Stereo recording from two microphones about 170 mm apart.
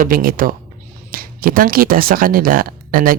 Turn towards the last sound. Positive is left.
turn(degrees=-60)  # may be behind; listen again after turning